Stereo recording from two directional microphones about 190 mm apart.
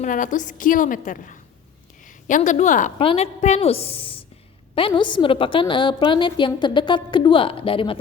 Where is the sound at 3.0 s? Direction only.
30° left (ahead or behind).